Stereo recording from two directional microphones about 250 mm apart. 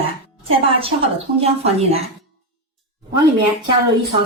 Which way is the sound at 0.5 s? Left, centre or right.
Right.